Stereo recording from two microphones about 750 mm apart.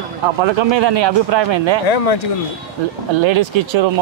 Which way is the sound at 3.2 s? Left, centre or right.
Right.